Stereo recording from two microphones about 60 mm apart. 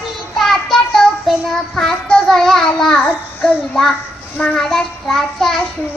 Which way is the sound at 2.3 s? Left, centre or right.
Centre.